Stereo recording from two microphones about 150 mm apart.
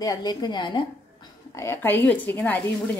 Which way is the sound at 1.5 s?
20° left (ahead or behind).